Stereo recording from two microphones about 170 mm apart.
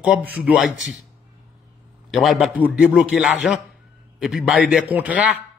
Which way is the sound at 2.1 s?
Centre (ahead or behind).